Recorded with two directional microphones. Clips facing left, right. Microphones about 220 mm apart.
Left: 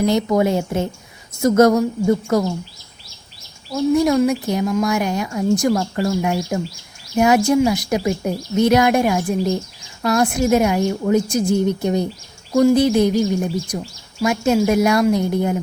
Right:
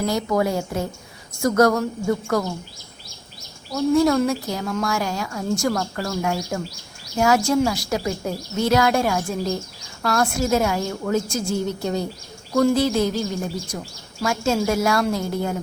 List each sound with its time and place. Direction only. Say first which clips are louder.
0.0 s a woman's voice: left 5 dB; 20° left (ahead or behind)
3.9 s a woman's voice: left 2 dB; 15° left (ahead or behind)